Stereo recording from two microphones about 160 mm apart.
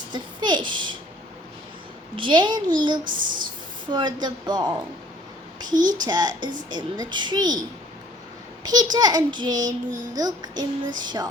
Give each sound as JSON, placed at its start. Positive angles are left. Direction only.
{"t": 0.1, "sound": "a woman's voice", "side_deg": -25}
{"t": 2.1, "sound": "speech", "side_deg": -30}
{"t": 3.1, "sound": "speech", "side_deg": -55}
{"t": 3.9, "sound": "speech", "side_deg": -25}
{"t": 6.1, "sound": "speech", "side_deg": -25}
{"t": 8.6, "sound": "speech", "side_deg": -25}